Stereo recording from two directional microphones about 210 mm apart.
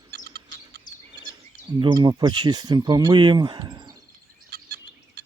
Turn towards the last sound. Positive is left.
turn(degrees=-20)  # may be behind; listen again after turning